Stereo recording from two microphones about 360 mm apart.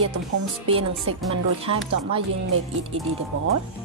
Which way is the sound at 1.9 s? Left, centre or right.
Right.